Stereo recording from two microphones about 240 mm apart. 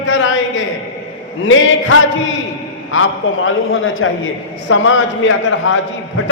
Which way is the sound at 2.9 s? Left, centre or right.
Left.